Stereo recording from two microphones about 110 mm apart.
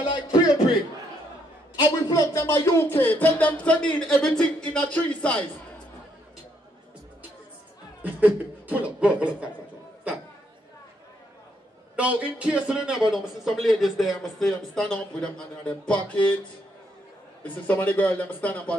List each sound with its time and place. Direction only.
0.1 s a sound: 35° left (ahead or behind)
1.8 s speech: 35° left (ahead or behind); by 5.4 s 10° left (ahead or behind)
8.0 s speech: 15° right (ahead or behind)
12.0 s music: 10° right (ahead or behind)
13.1 s speech: 5° right (ahead or behind)
17.4 s speech: 15° left (ahead or behind)